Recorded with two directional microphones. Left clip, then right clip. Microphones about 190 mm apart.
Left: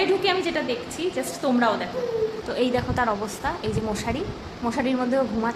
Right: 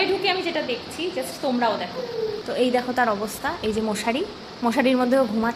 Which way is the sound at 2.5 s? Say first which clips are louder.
Right 3 dB; 15° right (ahead or behind).